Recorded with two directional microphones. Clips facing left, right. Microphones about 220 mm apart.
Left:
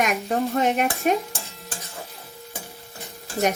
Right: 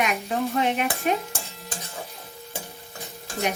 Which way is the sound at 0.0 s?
45° left (ahead or behind).